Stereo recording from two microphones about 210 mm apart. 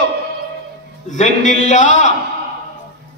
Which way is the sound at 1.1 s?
35° left (ahead or behind).